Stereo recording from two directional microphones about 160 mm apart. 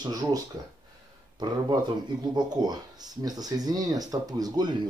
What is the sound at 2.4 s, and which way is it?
Speech, 25° right (ahead or behind).